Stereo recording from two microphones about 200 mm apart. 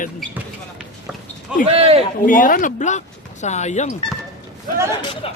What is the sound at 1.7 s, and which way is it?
Speech, 30° right (ahead or behind).